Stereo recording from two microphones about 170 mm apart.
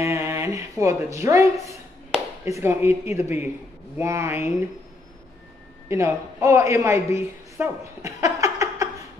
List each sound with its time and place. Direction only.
0.0 s speech: 15° right (ahead or behind)
5.9 s a woman's voice: 15° right (ahead or behind)